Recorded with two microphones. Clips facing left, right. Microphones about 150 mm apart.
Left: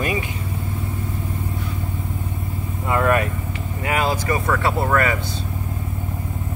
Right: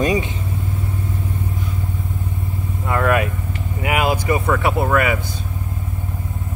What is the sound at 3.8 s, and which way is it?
Speech, 15° right (ahead or behind).